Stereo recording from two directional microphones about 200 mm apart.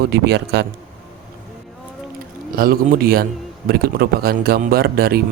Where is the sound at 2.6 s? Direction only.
45° right (ahead or behind).